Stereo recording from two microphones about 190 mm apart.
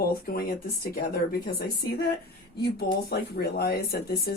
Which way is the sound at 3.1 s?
55° left (ahead or behind).